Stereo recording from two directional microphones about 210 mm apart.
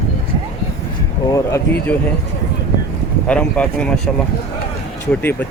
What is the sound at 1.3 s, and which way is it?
Speech, 15° left (ahead or behind).